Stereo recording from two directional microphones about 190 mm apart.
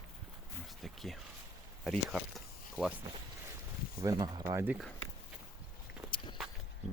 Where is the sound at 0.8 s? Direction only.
Centre (ahead or behind).